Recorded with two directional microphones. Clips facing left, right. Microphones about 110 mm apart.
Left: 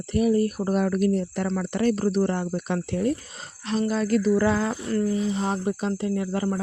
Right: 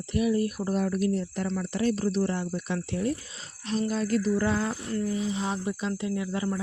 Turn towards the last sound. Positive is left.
turn(degrees=45)  # may be behind; listen again after turning